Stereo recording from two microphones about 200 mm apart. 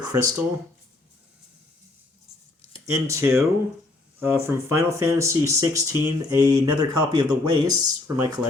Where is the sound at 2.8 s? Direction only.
15° right (ahead or behind).